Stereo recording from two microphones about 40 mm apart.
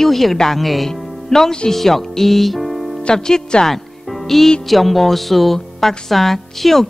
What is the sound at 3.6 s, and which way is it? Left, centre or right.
Music, centre.